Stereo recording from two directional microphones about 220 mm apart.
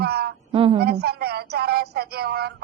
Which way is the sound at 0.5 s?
25° right (ahead or behind).